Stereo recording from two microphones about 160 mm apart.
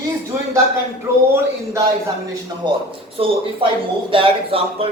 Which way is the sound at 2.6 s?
30° right (ahead or behind).